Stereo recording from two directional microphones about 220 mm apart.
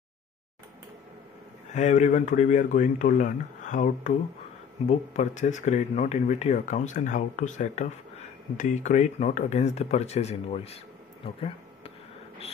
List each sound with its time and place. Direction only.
1.7 s speech: 30° left (ahead or behind)